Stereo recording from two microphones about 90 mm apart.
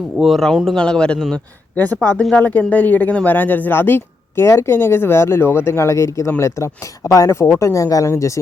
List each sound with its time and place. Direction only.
0.2 s speech: centre (ahead or behind); by 8.3 s 35° left (ahead or behind)